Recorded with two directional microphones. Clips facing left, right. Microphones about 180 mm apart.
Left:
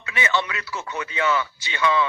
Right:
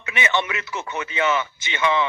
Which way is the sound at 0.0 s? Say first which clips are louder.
Right 1 dB; 20° right (ahead or behind).